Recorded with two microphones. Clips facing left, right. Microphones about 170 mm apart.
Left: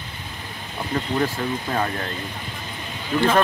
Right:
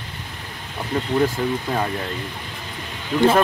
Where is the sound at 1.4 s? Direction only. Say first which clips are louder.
Right 3 dB; 5° right (ahead or behind).